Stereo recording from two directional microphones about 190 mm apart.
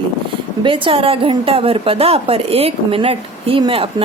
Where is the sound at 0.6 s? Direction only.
25° right (ahead or behind).